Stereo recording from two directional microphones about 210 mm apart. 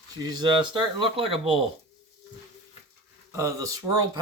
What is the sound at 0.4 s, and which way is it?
Speech, 20° right (ahead or behind).